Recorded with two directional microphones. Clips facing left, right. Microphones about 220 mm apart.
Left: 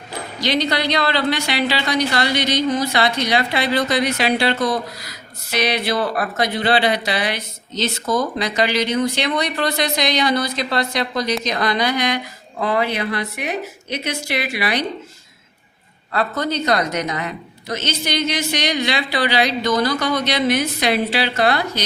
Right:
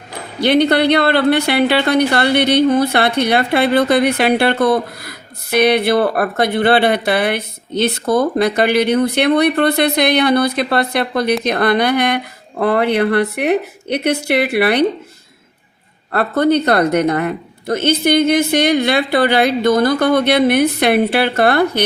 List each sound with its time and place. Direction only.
0.3 s a woman's voice: 60° right (ahead or behind)
16.1 s a woman's voice: 60° right (ahead or behind)